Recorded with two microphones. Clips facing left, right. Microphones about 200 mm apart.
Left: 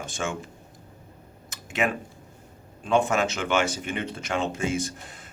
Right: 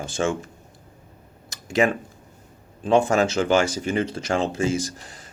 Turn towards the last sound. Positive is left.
turn(degrees=-35)  # may be behind; listen again after turning